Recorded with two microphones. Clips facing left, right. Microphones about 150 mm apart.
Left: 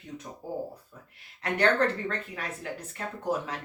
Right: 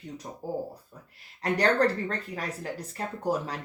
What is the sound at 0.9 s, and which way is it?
Speech, 35° right (ahead or behind).